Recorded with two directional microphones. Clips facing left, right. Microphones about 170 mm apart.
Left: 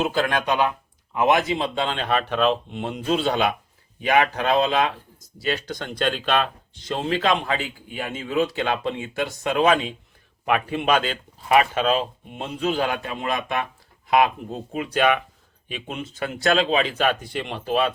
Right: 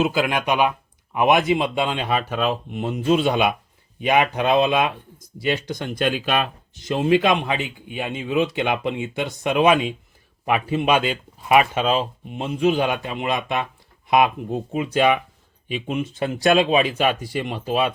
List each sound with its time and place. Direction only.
0.0 s speech: 10° right (ahead or behind)
16.1 s speech: 20° right (ahead or behind)